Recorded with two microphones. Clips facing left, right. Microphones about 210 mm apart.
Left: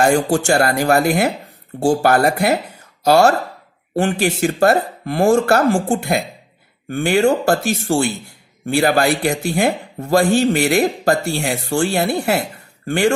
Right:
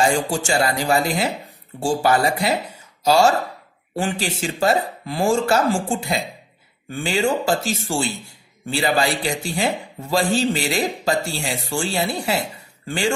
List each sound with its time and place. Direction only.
0.0 s speech: 60° left (ahead or behind)